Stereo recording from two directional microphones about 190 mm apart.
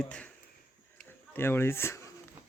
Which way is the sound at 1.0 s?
10° left (ahead or behind).